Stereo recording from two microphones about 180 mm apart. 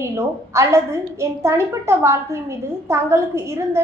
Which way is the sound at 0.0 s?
15° right (ahead or behind).